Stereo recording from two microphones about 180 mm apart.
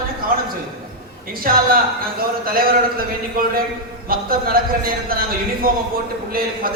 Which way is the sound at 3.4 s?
55° right (ahead or behind).